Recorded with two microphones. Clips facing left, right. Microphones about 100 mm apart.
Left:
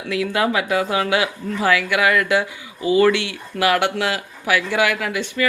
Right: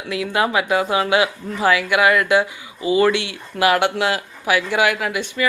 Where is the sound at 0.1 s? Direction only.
25° right (ahead or behind).